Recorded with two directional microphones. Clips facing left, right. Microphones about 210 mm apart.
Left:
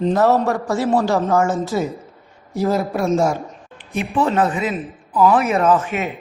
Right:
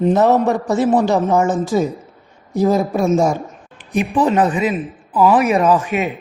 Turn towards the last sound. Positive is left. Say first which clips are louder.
# right 2 dB
turn(degrees=-15)  # may be behind; listen again after turning